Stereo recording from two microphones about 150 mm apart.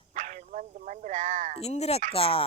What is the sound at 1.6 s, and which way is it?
Speech, 45° left (ahead or behind).